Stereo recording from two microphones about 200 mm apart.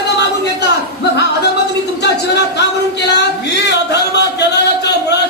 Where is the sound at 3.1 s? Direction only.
55° left (ahead or behind).